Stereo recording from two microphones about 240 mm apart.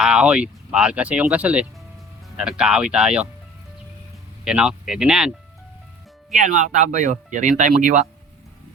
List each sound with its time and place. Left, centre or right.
0.0 s speech: centre
4.4 s speech: centre
6.7 s speech: right